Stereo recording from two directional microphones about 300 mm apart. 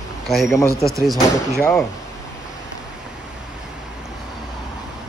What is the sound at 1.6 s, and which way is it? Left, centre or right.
Speech, centre.